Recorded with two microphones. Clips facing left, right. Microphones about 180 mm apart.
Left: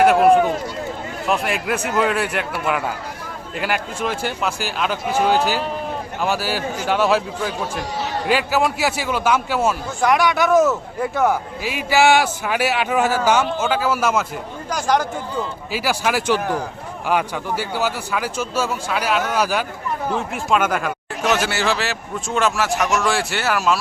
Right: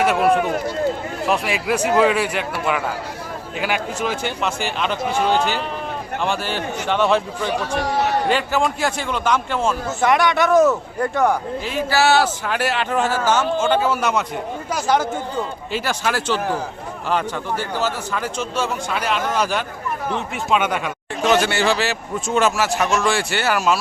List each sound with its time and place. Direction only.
0.0 s speech: centre (ahead or behind)
1.3 s speech: centre (ahead or behind)
7.7 s speech: 65° right (ahead or behind)
8.3 s a man's voice: 5° left (ahead or behind)
15.7 s a man's voice: 10° left (ahead or behind)